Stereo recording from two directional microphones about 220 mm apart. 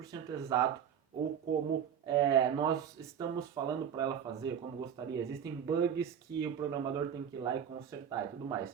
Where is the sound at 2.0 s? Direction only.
20° right (ahead or behind).